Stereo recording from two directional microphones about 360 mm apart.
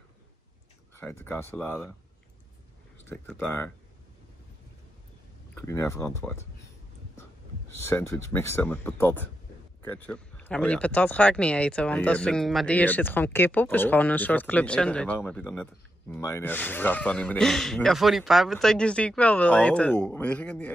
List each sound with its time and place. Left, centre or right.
0.9 s speech: centre
3.1 s speech: centre
5.5 s speech: centre
7.8 s speech: centre